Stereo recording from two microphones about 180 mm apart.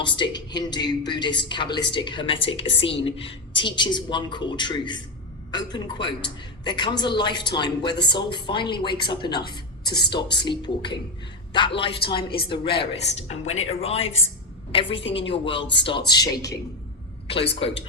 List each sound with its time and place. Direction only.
0.0 s a woman's voice: 25° left (ahead or behind)
17.5 s speech: 30° left (ahead or behind)